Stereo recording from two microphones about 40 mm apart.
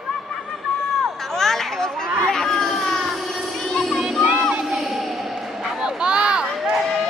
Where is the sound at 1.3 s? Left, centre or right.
Centre.